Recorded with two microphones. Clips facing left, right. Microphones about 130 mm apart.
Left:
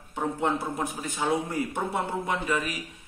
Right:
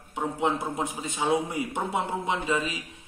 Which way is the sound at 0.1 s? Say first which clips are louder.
Even; 15° right (ahead or behind).